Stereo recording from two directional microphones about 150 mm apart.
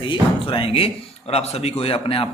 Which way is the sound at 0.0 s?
35° left (ahead or behind).